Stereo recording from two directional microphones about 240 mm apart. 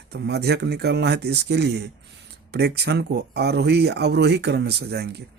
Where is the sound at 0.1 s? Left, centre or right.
Right.